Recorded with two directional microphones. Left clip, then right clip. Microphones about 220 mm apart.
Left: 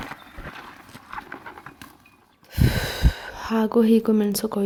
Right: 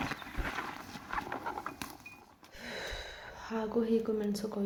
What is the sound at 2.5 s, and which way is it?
Gasp, 45° left (ahead or behind).